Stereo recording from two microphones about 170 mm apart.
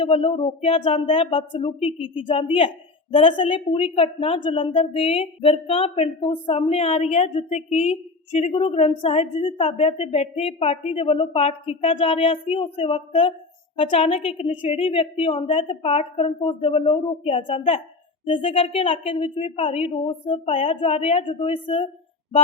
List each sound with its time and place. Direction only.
0.0 s a woman's voice: 30° left (ahead or behind)